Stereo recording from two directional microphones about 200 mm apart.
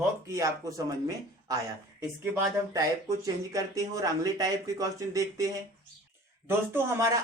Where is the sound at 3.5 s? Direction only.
15° right (ahead or behind).